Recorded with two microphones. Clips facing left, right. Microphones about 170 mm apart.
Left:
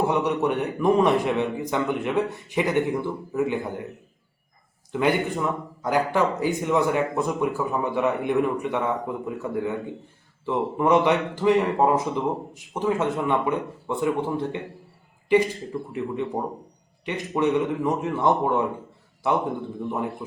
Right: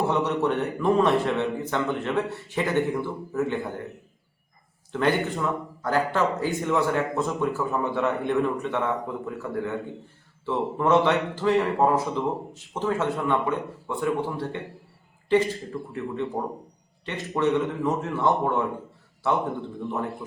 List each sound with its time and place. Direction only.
0.1 s a man's voice: 15° left (ahead or behind)
4.9 s a man's voice: 15° left (ahead or behind)